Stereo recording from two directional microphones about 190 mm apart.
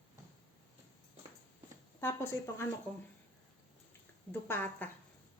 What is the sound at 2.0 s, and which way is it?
Speech, 10° left (ahead or behind).